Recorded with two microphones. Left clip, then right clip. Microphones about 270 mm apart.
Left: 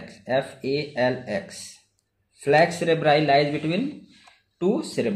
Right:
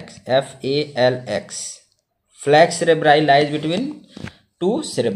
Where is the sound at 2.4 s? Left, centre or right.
Right.